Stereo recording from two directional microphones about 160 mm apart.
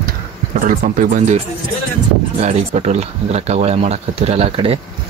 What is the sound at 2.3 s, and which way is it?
Speech, 45° right (ahead or behind).